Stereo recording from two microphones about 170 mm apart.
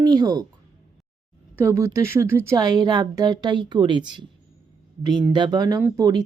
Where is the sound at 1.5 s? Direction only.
15° right (ahead or behind).